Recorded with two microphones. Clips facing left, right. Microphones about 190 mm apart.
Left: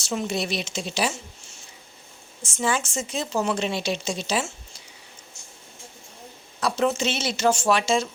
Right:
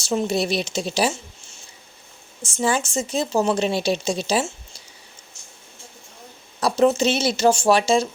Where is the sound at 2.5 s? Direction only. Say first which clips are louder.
Right 3 dB; 35° right (ahead or behind).